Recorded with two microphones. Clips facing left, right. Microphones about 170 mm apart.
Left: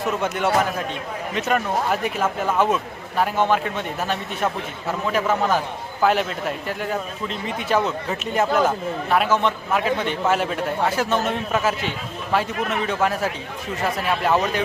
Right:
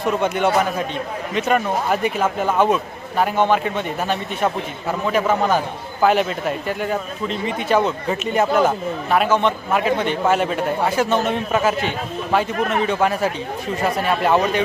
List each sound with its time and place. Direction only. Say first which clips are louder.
0.0 s speech: right 4 dB; 5° left (ahead or behind)
12.5 s a man's voice: right 4 dB; 45° right (ahead or behind)
12.8 s speech: right 2 dB; centre (ahead or behind)